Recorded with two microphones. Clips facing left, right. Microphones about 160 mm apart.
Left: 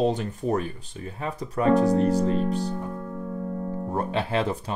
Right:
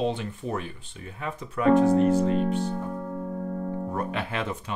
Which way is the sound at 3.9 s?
30° left (ahead or behind).